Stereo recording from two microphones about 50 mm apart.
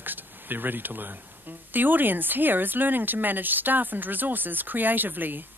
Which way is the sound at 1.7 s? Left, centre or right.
Right.